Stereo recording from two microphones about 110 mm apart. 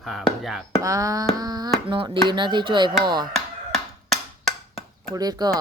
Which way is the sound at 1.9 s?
50° right (ahead or behind).